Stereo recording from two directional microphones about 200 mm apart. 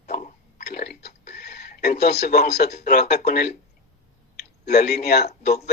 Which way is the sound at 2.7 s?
50° left (ahead or behind).